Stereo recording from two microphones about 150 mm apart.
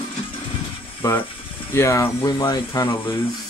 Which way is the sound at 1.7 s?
15° left (ahead or behind).